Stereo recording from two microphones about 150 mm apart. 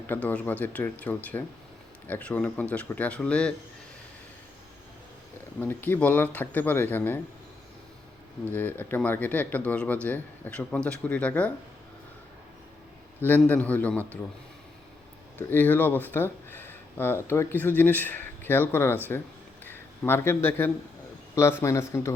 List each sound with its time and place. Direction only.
0.1 s speech: 10° left (ahead or behind)
5.5 s speech: 15° left (ahead or behind)
8.5 s speech: 10° left (ahead or behind)
13.2 s speech: 10° left (ahead or behind)
15.4 s speech: 10° left (ahead or behind)